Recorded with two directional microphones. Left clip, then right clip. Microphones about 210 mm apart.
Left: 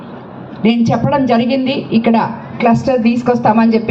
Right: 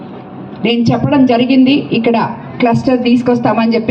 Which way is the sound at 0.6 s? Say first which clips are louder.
Right 1 dB; 55° right (ahead or behind).